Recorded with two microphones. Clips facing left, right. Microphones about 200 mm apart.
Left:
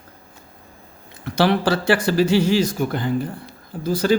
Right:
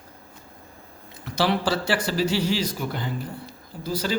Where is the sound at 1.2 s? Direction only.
55° left (ahead or behind).